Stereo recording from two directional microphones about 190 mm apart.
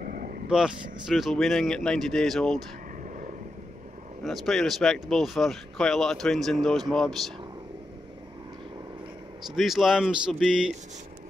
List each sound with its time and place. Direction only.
0.0 s vehicle: 50° right (ahead or behind)
0.5 s speech: 5° right (ahead or behind)
3.0 s vehicle: 40° right (ahead or behind)
4.2 s speech: centre (ahead or behind)
9.6 s speech: centre (ahead or behind)